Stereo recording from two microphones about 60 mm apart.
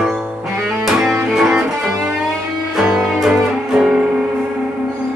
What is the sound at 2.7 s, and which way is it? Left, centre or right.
Music, centre.